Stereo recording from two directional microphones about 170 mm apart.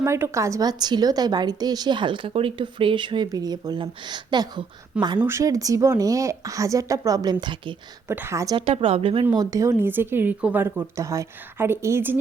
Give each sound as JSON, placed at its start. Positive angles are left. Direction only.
{"t": 0.0, "sound": "a woman's voice", "side_deg": -15}
{"t": 8.0, "sound": "a woman's voice", "side_deg": -15}
{"t": 8.5, "sound": "a woman's voice", "side_deg": -30}
{"t": 9.4, "sound": "a woman's voice", "side_deg": -20}